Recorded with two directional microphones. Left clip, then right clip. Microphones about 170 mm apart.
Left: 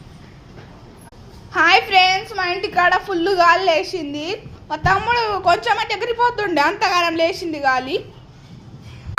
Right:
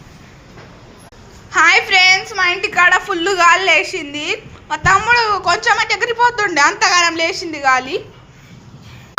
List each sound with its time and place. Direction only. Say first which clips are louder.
1.5 s a woman's voice: right 3 dB; 15° left (ahead or behind)